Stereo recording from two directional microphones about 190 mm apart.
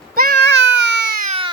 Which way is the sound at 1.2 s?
35° right (ahead or behind).